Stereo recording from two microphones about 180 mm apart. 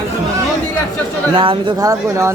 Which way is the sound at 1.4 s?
30° right (ahead or behind).